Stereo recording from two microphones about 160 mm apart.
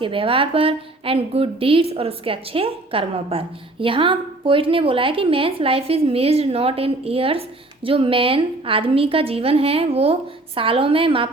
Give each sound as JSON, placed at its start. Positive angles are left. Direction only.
{"t": 0.0, "sound": "a woman's voice", "side_deg": -35}